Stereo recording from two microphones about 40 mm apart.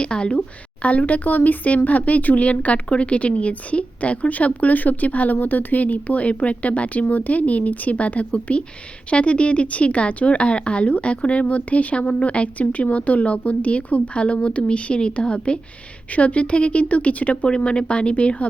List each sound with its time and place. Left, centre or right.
0.0 s speech: left
17.5 s speech: left